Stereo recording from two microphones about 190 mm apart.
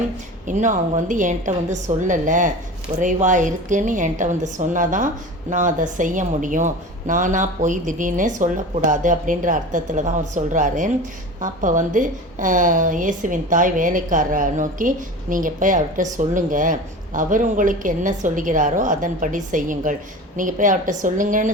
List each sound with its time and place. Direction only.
0.4 s a woman's voice: 40° right (ahead or behind)